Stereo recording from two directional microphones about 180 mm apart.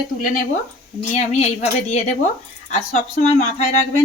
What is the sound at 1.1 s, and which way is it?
A woman's voice, 40° left (ahead or behind).